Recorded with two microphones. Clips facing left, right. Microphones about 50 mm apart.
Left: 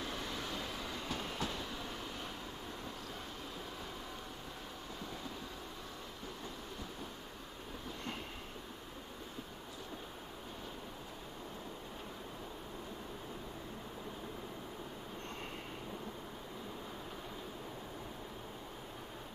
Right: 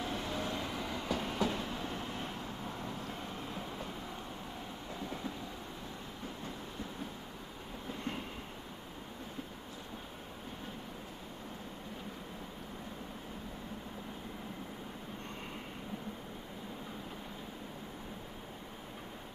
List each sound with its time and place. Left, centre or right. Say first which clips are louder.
1.0 s train: right 7 dB; right